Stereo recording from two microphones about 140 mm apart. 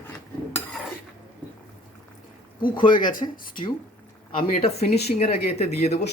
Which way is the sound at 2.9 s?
75° left (ahead or behind).